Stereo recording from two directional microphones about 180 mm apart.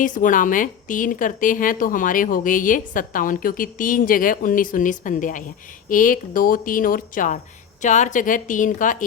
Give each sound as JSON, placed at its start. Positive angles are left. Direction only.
{"t": 0.0, "sound": "a woman's voice", "side_deg": 45}